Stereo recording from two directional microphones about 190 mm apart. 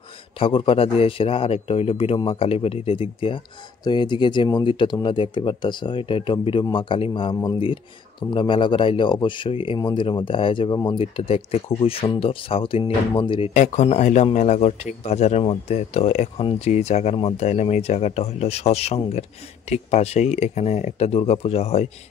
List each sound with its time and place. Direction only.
0.4 s a man's voice: 30° left (ahead or behind)
13.5 s speech: 40° left (ahead or behind)